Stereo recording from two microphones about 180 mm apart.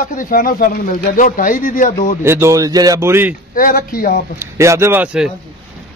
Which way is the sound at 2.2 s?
15° right (ahead or behind).